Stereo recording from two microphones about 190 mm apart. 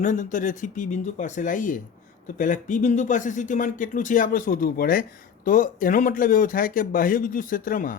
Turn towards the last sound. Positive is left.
turn(degrees=45)  # may be behind; listen again after turning